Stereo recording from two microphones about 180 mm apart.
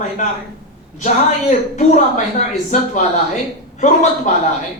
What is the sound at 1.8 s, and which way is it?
A woman's voice, 40° left (ahead or behind).